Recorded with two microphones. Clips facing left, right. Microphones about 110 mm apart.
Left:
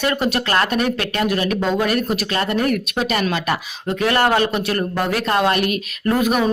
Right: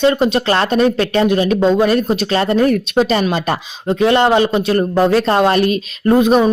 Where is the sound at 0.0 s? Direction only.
25° right (ahead or behind).